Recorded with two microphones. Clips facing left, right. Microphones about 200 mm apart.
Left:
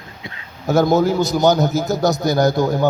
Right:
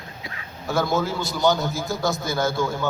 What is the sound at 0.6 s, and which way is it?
A man's voice, 40° left (ahead or behind).